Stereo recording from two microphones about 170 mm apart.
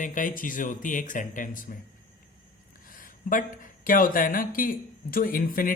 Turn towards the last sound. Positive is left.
turn(degrees=55)  # may be behind; listen again after turning